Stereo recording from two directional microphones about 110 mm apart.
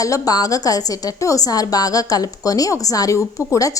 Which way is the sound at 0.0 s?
35° left (ahead or behind).